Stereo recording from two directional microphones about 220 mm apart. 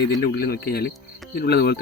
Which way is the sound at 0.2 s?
45° left (ahead or behind).